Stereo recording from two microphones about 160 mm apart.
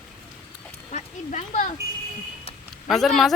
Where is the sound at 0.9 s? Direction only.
50° left (ahead or behind).